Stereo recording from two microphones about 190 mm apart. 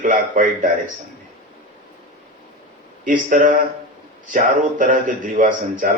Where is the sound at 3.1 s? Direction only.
45° right (ahead or behind).